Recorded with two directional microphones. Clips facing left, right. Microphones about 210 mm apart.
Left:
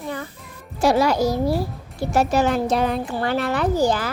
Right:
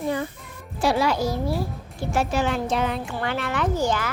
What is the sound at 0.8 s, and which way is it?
A woman's voice, 40° left (ahead or behind).